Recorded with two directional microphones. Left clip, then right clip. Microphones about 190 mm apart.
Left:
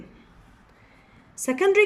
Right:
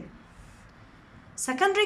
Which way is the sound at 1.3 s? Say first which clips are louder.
Left 4 dB; 15° left (ahead or behind).